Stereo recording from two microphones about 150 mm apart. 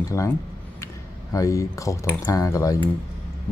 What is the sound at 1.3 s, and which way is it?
Speech, 20° left (ahead or behind).